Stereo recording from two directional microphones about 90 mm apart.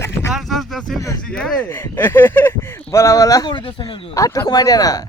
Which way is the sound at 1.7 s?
25° left (ahead or behind).